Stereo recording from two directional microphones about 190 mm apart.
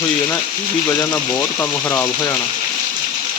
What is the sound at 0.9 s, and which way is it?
Speech, 10° left (ahead or behind).